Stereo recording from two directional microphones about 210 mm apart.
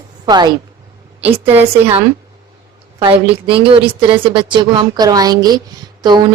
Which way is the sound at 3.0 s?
25° right (ahead or behind).